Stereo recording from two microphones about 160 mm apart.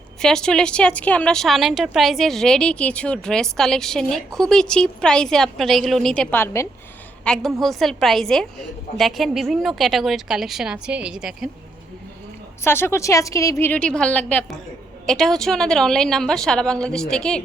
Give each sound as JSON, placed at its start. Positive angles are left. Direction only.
{"t": 0.2, "sound": "speech", "side_deg": 5}
{"t": 6.3, "sound": "a woman's voice", "side_deg": 15}
{"t": 7.3, "sound": "speech", "side_deg": 0}
{"t": 12.6, "sound": "a woman's voice", "side_deg": 15}